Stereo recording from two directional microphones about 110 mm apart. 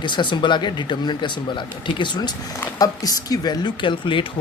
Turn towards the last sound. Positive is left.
turn(degrees=50)  # may be behind; listen again after turning